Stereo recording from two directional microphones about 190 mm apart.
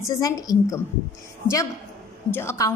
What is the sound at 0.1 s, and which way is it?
Speech, 20° left (ahead or behind).